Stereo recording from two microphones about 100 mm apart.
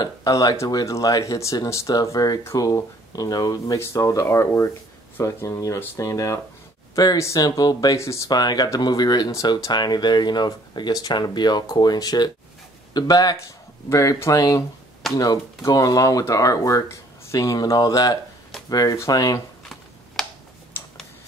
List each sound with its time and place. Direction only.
0.0 s speech: 40° left (ahead or behind)
8.3 s speech: 45° left (ahead or behind)
13.8 s speech: 30° left (ahead or behind)
20.2 s tick-tock: 5° left (ahead or behind)
20.7 s tick-tock: 20° left (ahead or behind)